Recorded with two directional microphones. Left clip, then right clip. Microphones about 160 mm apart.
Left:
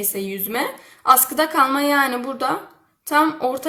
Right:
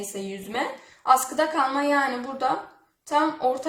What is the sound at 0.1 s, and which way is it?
A woman's voice, 30° left (ahead or behind).